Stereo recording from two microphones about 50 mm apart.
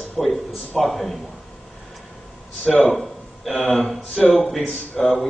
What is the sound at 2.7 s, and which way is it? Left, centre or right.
Speech, centre.